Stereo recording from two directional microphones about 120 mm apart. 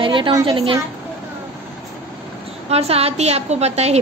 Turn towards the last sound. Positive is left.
turn(degrees=-65)  # may be behind; listen again after turning